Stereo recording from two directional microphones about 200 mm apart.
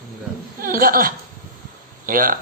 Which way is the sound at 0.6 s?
45° right (ahead or behind).